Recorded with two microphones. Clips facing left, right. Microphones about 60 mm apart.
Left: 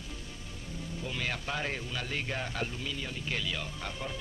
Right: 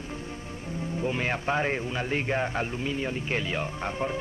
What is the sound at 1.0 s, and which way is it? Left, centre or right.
A man's voice, right.